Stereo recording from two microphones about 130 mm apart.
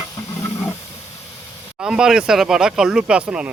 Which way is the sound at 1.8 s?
5° right (ahead or behind).